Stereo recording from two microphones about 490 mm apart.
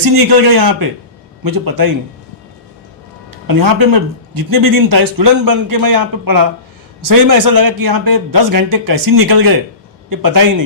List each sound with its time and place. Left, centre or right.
0.0 s speech: right
3.4 s speech: right